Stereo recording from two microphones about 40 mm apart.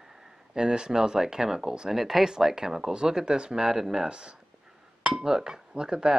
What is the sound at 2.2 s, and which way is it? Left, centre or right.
Speech, centre.